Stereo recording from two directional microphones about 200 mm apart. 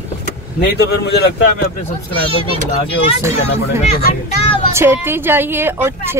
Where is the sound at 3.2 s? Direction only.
15° right (ahead or behind).